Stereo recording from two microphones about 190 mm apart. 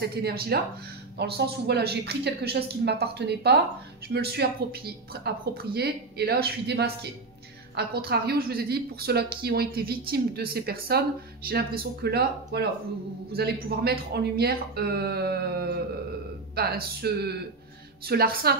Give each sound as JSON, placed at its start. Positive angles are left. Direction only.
{"t": 0.0, "sound": "a woman's voice", "side_deg": -55}